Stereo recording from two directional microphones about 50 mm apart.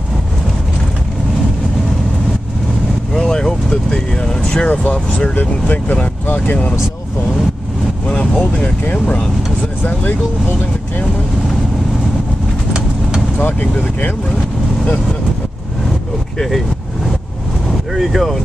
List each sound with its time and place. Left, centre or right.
3.2 s vehicle: centre
4.6 s speech: left
8.1 s speech: left
13.4 s speech: left
16.3 s speech: centre
17.9 s speech: centre